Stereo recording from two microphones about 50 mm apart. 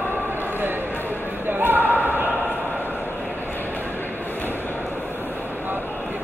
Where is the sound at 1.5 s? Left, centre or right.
Right.